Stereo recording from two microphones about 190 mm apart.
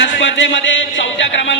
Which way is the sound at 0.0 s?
70° left (ahead or behind).